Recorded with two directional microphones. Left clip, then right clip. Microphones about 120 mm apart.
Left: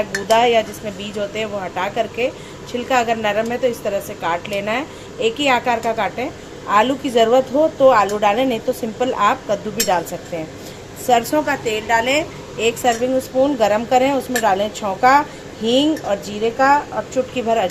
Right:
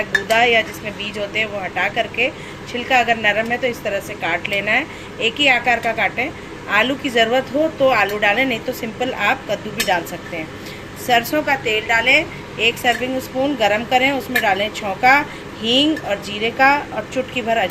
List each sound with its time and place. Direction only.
0.3 s a woman's voice: 25° left (ahead or behind)
17.3 s speech: 30° left (ahead or behind)